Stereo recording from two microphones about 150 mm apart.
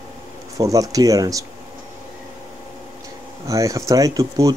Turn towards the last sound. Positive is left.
turn(degrees=-25)  # may be behind; listen again after turning